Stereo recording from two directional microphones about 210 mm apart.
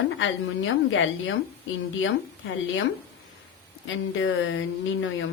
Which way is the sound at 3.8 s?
65° left (ahead or behind).